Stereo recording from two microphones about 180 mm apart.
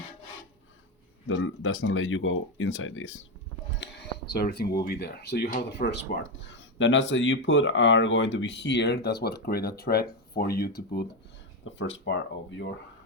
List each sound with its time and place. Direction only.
1.3 s speech: 90° left
3.8 s a sound: 75° left (ahead or behind)
4.3 s speech: 60° left (ahead or behind)
11.8 s speech: 90° left